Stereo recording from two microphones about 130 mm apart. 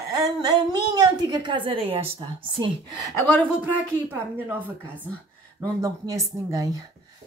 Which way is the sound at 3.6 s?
15° right (ahead or behind).